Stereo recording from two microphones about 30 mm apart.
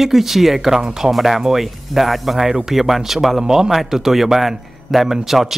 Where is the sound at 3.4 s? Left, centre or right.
Centre.